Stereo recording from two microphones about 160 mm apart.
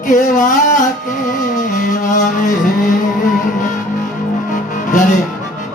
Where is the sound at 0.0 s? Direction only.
50° left (ahead or behind).